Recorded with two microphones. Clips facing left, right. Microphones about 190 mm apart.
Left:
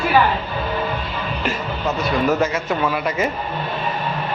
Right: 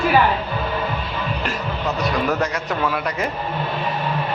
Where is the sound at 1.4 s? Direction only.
Centre (ahead or behind).